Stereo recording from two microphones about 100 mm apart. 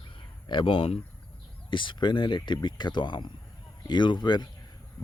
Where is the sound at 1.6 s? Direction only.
55° left (ahead or behind).